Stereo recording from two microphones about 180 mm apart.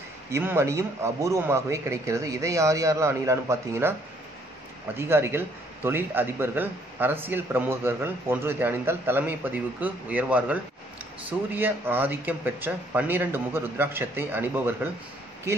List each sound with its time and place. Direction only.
0.3 s speech: 15° right (ahead or behind)
4.9 s speech: 15° right (ahead or behind)